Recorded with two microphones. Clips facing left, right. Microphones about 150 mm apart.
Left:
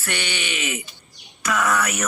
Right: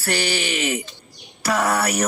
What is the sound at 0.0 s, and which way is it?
Speech, 35° right (ahead or behind).